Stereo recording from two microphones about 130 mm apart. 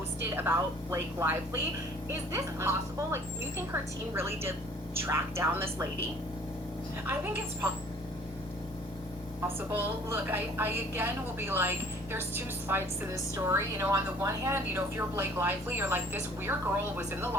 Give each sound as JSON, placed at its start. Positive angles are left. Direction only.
{"t": 0.2, "sound": "a woman's voice", "side_deg": -15}
{"t": 7.1, "sound": "a woman's voice", "side_deg": -15}
{"t": 9.6, "sound": "a woman's voice", "side_deg": -15}